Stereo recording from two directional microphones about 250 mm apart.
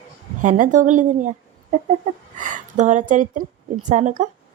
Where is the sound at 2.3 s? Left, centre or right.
Right.